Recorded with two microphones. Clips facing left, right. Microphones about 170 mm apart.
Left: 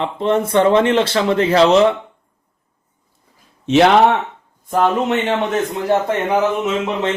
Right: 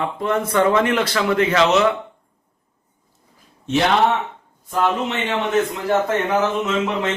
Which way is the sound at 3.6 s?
70° left (ahead or behind).